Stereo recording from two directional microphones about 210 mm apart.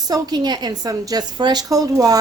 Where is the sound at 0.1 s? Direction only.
20° right (ahead or behind).